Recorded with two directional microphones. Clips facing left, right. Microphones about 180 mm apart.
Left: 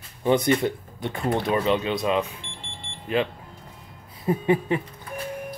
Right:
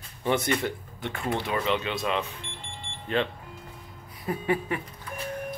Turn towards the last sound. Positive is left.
turn(degrees=25)  # may be behind; listen again after turning